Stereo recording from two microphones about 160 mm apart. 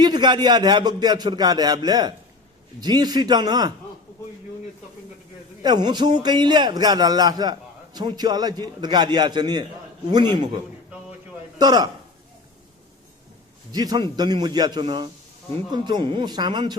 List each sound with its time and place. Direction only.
0.0 s speech: 25° right (ahead or behind)
5.6 s speech: 25° right (ahead or behind)
11.5 s speech: 25° right (ahead or behind)
13.7 s speech: 25° right (ahead or behind)